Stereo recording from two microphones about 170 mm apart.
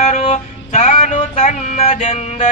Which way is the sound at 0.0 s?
40° left (ahead or behind).